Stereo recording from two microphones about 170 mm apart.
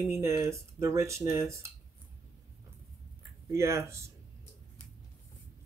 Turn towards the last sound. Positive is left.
turn(degrees=-15)  # may be behind; listen again after turning